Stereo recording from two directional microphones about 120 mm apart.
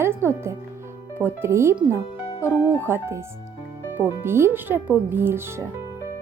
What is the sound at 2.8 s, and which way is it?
Speech, 20° right (ahead or behind).